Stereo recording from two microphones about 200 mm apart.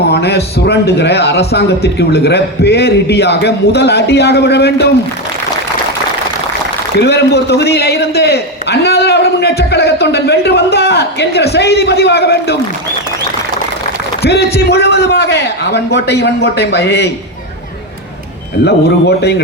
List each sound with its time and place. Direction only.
0.1 s a man's voice: 55° left (ahead or behind)
7.0 s a man's voice: 55° left (ahead or behind)
14.2 s a man's voice: 55° left (ahead or behind)
18.6 s a man's voice: 55° left (ahead or behind)